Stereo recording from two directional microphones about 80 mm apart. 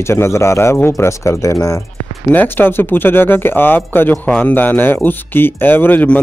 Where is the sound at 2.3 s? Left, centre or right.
Left.